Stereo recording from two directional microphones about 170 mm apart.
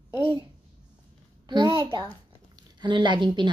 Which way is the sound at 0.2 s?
30° right (ahead or behind).